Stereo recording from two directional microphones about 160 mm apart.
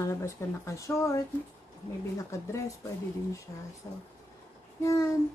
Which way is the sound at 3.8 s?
20° left (ahead or behind).